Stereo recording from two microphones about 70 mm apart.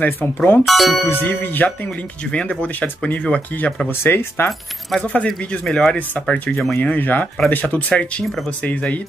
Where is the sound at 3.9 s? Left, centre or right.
Left.